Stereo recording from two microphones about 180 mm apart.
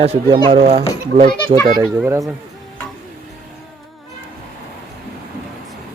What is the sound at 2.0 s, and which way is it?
Speech, 15° right (ahead or behind).